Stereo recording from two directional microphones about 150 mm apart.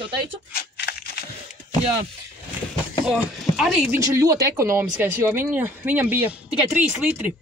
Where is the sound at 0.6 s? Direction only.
90° left.